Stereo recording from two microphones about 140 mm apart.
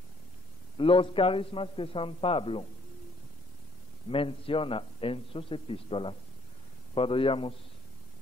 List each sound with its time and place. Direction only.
0.7 s a man's voice: 40° left (ahead or behind)
4.1 s a man's voice: 40° left (ahead or behind)